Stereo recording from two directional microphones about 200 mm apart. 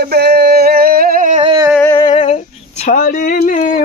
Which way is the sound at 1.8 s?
15° left (ahead or behind).